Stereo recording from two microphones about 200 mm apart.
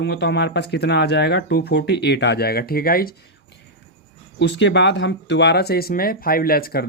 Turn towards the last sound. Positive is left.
turn(degrees=50)  # may be behind; listen again after turning